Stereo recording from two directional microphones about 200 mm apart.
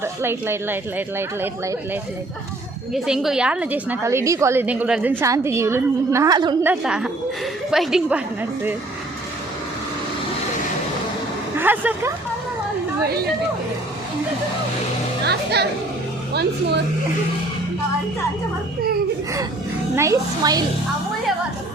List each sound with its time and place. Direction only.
0.0 s a woman's voice: 10° right (ahead or behind)
6.6 s a woman's voice: 5° right (ahead or behind)
11.5 s speech: 10° right (ahead or behind)
15.2 s speech: 55° right (ahead or behind)
20.0 s a woman's voice: 15° right (ahead or behind)